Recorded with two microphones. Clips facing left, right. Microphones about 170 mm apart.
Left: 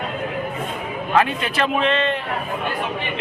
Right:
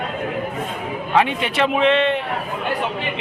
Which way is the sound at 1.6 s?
15° right (ahead or behind).